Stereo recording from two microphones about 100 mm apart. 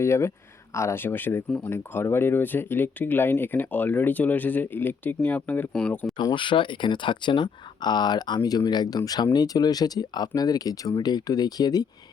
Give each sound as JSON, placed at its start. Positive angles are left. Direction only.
{"t": 0.0, "sound": "speech", "side_deg": 30}
{"t": 1.7, "sound": "speech", "side_deg": 25}
{"t": 6.3, "sound": "speech", "side_deg": 55}